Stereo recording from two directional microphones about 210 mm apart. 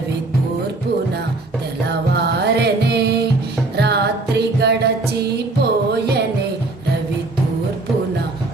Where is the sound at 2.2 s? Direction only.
50° right (ahead or behind).